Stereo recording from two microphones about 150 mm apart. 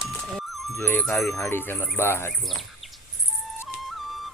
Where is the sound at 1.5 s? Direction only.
15° left (ahead or behind).